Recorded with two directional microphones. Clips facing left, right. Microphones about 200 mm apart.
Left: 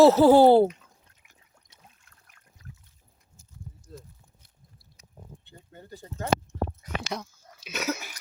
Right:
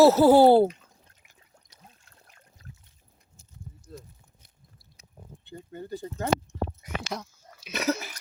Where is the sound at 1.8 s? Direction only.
30° right (ahead or behind).